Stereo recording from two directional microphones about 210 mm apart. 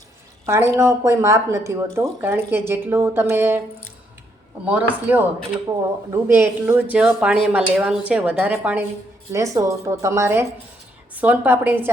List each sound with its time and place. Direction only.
0.4 s a woman's voice: 15° right (ahead or behind)
4.6 s a woman's voice: 5° right (ahead or behind)